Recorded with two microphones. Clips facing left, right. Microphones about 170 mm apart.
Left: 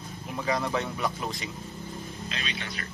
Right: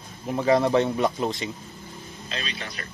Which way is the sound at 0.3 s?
30° right (ahead or behind).